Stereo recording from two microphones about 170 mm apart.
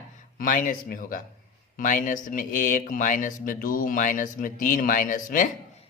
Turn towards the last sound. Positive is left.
turn(degrees=50)  # may be behind; listen again after turning